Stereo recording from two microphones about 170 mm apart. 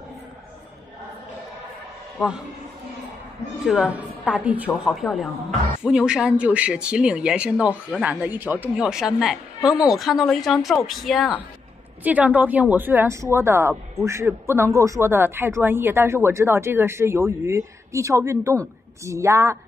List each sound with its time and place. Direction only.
2.1 s a man's voice: 5° right (ahead or behind)
3.6 s speech: 5° right (ahead or behind)